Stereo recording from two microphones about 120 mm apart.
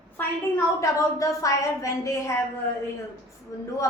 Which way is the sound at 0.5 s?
25° left (ahead or behind).